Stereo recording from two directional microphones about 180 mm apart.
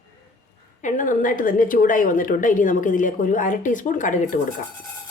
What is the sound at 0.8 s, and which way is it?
A woman's voice, 45° left (ahead or behind).